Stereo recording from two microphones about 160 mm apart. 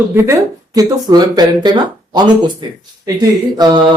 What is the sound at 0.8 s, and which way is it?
Speech, 25° right (ahead or behind).